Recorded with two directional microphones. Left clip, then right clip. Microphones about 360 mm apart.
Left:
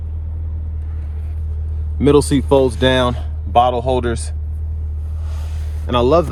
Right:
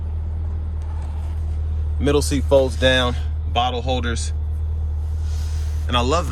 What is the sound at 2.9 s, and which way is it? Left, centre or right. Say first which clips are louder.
Speech: left 3 dB; centre.